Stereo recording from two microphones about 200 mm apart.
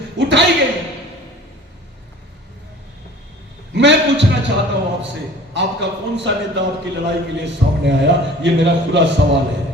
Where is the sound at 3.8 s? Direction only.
65° right (ahead or behind).